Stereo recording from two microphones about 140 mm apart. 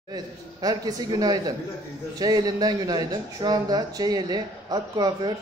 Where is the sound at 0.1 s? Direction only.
30° right (ahead or behind).